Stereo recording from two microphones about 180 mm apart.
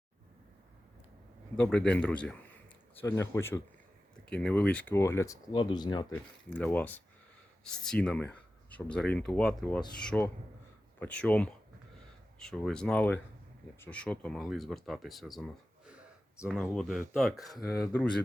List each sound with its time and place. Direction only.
1.5 s speech: 5° left (ahead or behind); by 6.1 s 25° left (ahead or behind)
6.5 s speech: 10° left (ahead or behind)